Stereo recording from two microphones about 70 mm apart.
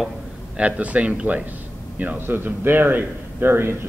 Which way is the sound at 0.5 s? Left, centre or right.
Centre.